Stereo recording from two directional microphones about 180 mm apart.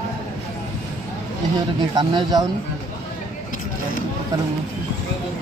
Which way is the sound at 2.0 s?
25° right (ahead or behind).